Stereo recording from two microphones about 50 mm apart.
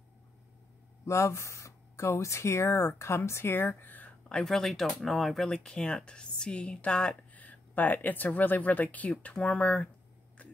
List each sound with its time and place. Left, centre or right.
1.0 s speech: left
3.4 s speech: left
4.3 s speech: centre
7.3 s speech: left